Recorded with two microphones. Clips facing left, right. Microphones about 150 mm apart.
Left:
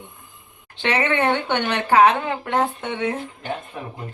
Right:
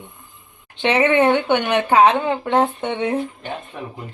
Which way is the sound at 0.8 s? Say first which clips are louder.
Right 5 dB; 20° right (ahead or behind).